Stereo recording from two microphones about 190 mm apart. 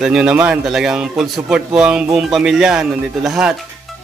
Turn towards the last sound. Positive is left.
turn(degrees=-5)  # may be behind; listen again after turning